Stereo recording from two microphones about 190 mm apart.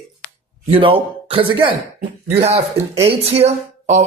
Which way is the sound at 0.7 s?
30° right (ahead or behind).